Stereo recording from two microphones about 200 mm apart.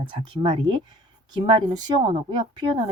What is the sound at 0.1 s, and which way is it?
Speech, 25° right (ahead or behind).